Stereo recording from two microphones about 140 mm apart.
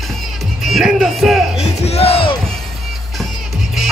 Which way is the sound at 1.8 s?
45° left (ahead or behind).